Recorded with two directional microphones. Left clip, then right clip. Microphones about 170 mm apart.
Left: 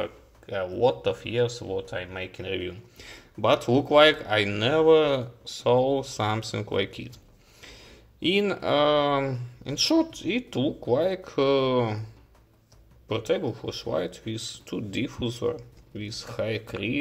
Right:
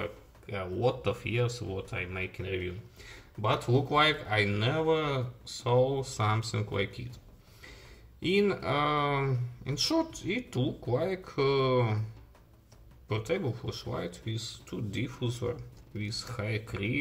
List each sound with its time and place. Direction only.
0.0 s speech: 30° left (ahead or behind)
2.1 s speech: 30° left (ahead or behind)
2.5 s speech: 50° left (ahead or behind); by 7.2 s 35° left (ahead or behind)
8.2 s speech: 35° left (ahead or behind)
13.8 s speech: 30° left (ahead or behind)